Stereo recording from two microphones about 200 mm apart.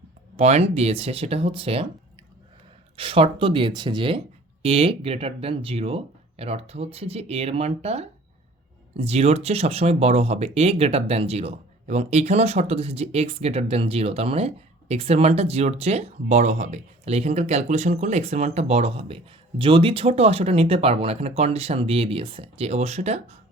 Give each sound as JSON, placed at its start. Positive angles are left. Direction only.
{"t": 0.3, "sound": "speech", "side_deg": -30}
{"t": 2.9, "sound": "speech", "side_deg": -25}